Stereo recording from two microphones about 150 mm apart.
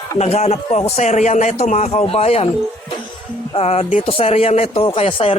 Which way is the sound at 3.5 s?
40° left (ahead or behind).